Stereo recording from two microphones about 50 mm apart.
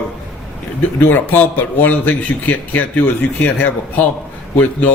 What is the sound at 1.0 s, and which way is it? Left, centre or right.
A man's voice, left.